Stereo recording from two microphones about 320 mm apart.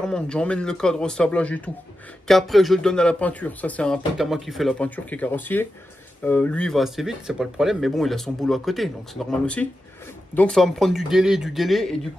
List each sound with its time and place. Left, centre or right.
0.0 s speech: centre